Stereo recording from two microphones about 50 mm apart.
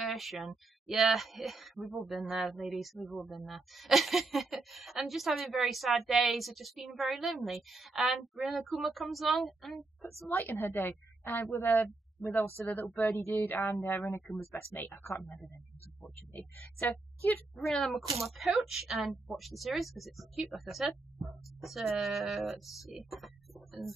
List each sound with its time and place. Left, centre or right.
0.0 s speech: centre
10.5 s a woman's voice: left
16.9 s speech: left
17.6 s speech: centre